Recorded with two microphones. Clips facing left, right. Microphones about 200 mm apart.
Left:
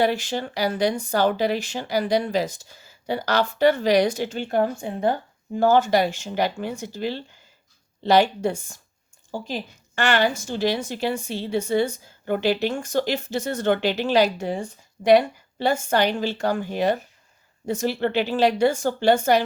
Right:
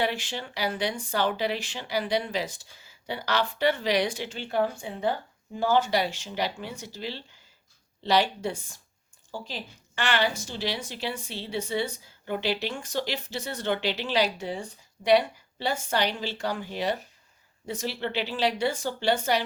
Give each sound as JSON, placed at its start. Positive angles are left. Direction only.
{"t": 0.0, "sound": "a woman's voice", "side_deg": 40}